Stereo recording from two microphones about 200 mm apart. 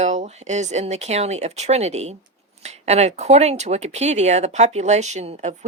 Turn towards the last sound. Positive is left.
turn(degrees=-35)  # may be behind; listen again after turning